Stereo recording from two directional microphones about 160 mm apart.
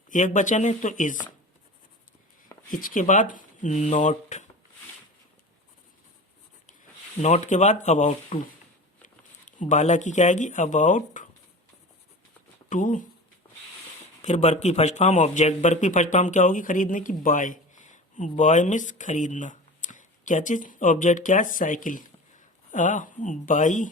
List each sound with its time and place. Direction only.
0.1 s speech: 50° left (ahead or behind)
2.6 s speech: 60° left (ahead or behind)
7.2 s speech: 45° left (ahead or behind)
9.5 s speech: 50° left (ahead or behind)
12.6 s speech: 55° left (ahead or behind)
14.2 s speech: 45° left (ahead or behind)